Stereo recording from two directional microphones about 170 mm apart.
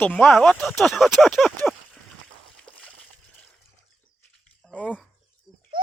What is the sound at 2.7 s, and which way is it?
Slosh, 30° left (ahead or behind).